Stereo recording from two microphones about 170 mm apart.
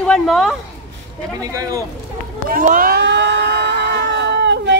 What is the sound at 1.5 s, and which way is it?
Speech, 20° right (ahead or behind).